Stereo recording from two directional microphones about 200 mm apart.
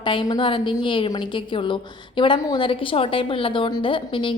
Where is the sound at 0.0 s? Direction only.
25° left (ahead or behind).